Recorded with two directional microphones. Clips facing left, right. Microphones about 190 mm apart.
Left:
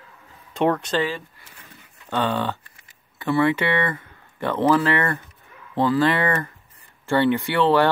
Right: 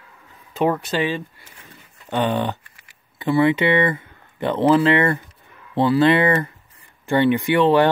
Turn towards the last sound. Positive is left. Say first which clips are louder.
# right 3 dB
turn(degrees=-15)  # may be behind; listen again after turning